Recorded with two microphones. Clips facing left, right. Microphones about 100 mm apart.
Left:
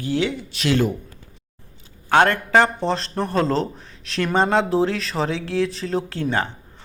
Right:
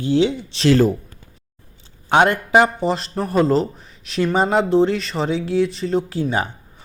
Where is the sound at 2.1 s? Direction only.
15° right (ahead or behind).